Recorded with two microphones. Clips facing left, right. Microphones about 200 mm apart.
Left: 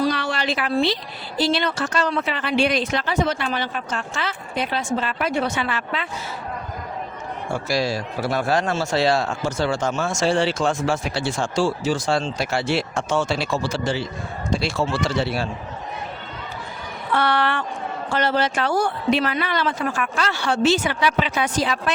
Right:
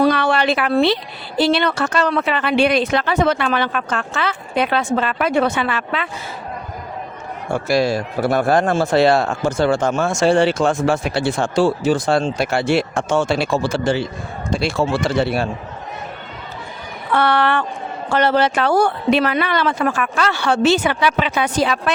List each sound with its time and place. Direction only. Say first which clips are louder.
0.0 s a sound: right 7 dB; 60° right (ahead or behind)
1.4 s speech: right 5 dB; 60° right (ahead or behind)
7.5 s speech: right 6 dB; 55° right (ahead or behind)
17.2 s speech: right 5 dB; 60° right (ahead or behind)